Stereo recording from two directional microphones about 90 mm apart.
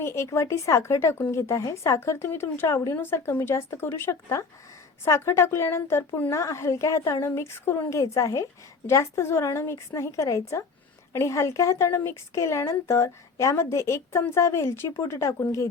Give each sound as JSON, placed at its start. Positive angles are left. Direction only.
{"t": 0.0, "sound": "a woman's voice", "side_deg": 30}